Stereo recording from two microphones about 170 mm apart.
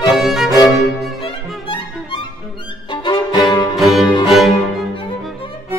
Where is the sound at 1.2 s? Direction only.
30° left (ahead or behind).